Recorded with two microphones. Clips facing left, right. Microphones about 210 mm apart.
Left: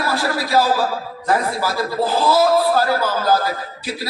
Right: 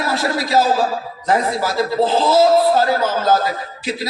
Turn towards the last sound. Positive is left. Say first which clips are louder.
# right 3 dB
turn(degrees=-20)  # may be behind; listen again after turning